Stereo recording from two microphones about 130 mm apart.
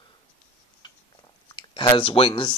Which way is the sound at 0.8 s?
35° left (ahead or behind).